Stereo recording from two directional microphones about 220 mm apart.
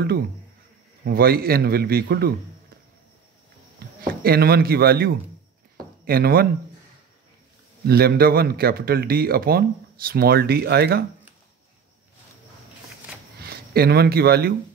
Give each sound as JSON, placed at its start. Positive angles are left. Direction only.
{"t": 1.0, "sound": "a man's voice", "side_deg": -45}
{"t": 4.1, "sound": "a man's voice", "side_deg": -45}
{"t": 7.8, "sound": "a man's voice", "side_deg": -45}
{"t": 13.4, "sound": "speech", "side_deg": -45}